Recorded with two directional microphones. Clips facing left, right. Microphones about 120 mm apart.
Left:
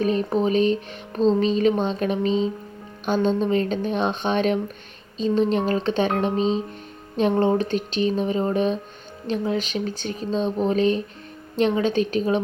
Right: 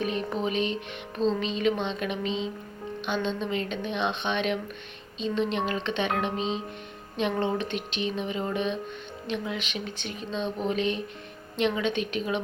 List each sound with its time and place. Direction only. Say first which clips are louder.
0.0 s speech: left 7 dB; 35° left (ahead or behind)